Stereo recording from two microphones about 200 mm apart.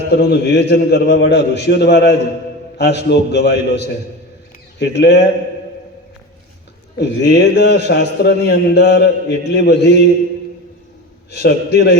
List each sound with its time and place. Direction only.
0.2 s a man's voice: 55° left (ahead or behind)
6.9 s a man's voice: 55° left (ahead or behind)
11.3 s a man's voice: 55° left (ahead or behind)